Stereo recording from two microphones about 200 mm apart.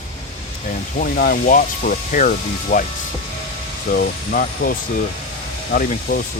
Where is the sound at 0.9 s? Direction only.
45° left (ahead or behind).